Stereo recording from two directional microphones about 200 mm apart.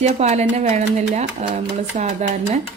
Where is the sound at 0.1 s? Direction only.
35° right (ahead or behind).